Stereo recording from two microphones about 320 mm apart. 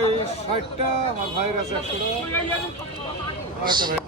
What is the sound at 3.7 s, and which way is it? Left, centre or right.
Speech, centre.